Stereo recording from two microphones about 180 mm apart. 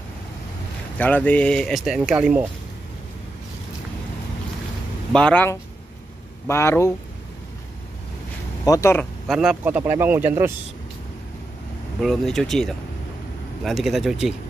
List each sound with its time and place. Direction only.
0.9 s speech: 10° left (ahead or behind)
5.1 s speech: 5° left (ahead or behind)
8.6 s speech: 15° left (ahead or behind)
9.3 s speech: 5° right (ahead or behind)
12.0 s speech: centre (ahead or behind)